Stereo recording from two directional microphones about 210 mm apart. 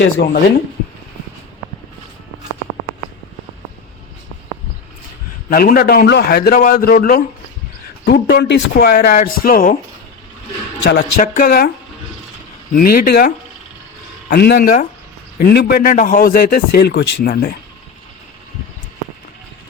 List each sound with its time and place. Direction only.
0.2 s a man's voice: 50° left (ahead or behind)
5.5 s a man's voice: 45° left (ahead or behind)
10.8 s a man's voice: 50° left (ahead or behind)
12.7 s a man's voice: 45° left (ahead or behind)